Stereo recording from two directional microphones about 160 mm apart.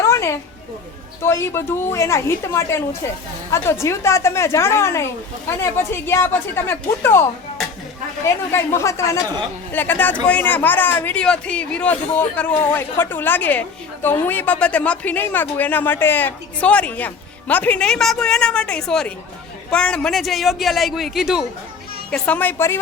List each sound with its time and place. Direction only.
0.0 s a sound: 15° left (ahead or behind)
1.2 s speech: 15° left (ahead or behind)
8.5 s a man's voice: 15° left (ahead or behind); by 21.4 s 5° right (ahead or behind)
22.1 s speech: 10° left (ahead or behind)